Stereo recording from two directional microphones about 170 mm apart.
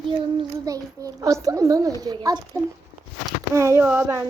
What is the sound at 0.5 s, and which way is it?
A child's voice, 20° right (ahead or behind).